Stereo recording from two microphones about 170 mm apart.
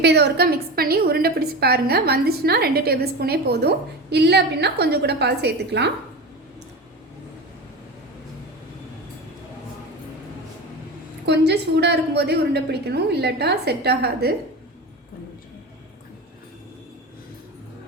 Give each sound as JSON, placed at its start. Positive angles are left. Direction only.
{"t": 0.0, "sound": "a woman's voice", "side_deg": -80}
{"t": 11.3, "sound": "a woman's voice", "side_deg": -80}